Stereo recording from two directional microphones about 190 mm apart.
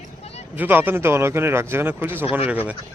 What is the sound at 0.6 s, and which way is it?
A man's voice, 10° right (ahead or behind).